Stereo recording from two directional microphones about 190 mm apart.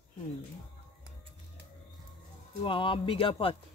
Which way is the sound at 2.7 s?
25° left (ahead or behind).